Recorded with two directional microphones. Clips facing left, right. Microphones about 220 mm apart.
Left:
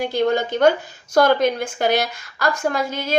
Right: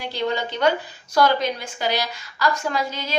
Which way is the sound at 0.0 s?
50° left (ahead or behind).